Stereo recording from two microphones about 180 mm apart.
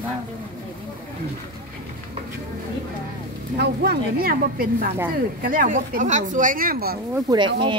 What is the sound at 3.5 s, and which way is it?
Speech, 60° right (ahead or behind).